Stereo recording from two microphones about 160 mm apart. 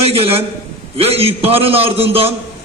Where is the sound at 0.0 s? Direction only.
35° right (ahead or behind).